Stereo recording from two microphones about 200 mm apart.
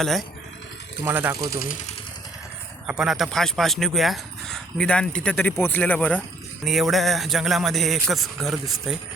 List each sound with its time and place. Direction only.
0.0 s speech: centre (ahead or behind)
1.0 s speech: 10° right (ahead or behind)
1.4 s speech: 50° left (ahead or behind)
3.0 s speech: centre (ahead or behind)